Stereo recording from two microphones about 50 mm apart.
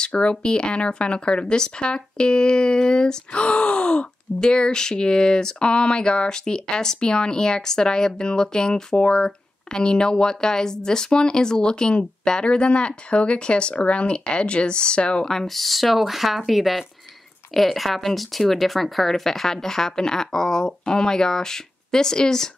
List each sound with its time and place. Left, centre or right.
0.1 s speech: left
15.2 s speech: centre